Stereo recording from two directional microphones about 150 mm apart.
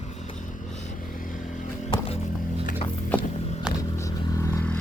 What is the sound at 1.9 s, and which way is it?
Music, 40° left (ahead or behind).